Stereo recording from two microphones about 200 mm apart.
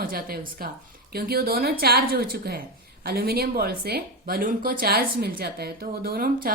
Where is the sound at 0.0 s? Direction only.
45° right (ahead or behind).